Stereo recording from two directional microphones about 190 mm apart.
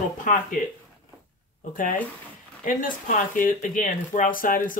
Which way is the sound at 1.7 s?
45° left (ahead or behind).